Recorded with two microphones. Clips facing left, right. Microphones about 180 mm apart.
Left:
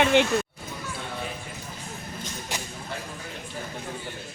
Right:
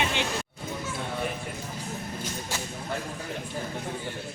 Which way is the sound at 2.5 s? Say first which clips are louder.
Left 1 dB; 15° left (ahead or behind).